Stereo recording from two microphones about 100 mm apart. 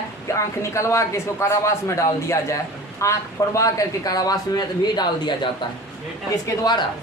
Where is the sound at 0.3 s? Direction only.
30° left (ahead or behind).